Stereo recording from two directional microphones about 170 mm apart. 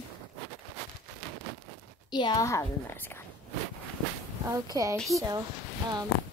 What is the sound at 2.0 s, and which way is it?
A woman's voice, 25° left (ahead or behind).